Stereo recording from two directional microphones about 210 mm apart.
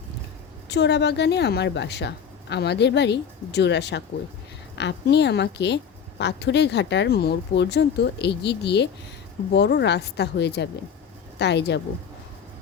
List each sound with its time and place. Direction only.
0.7 s a woman's voice: 55° left (ahead or behind)